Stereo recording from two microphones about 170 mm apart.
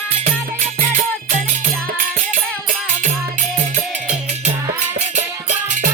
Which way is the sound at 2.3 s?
45° right (ahead or behind).